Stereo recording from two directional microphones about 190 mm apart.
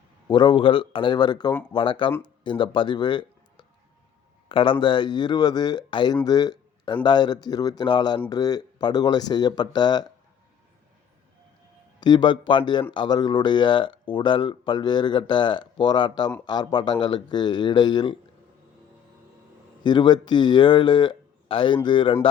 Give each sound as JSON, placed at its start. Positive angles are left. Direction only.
{"t": 0.3, "sound": "speech", "side_deg": 25}
{"t": 11.9, "sound": "speech", "side_deg": 20}
{"t": 19.8, "sound": "speech", "side_deg": 25}